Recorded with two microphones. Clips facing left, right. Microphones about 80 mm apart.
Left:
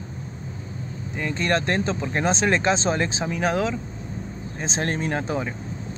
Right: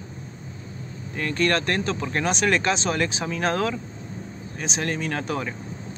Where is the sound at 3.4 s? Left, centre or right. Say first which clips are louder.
Left 1 dB; centre.